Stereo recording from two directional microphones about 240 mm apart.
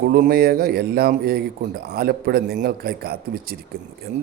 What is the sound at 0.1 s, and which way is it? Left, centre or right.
A man's voice, right.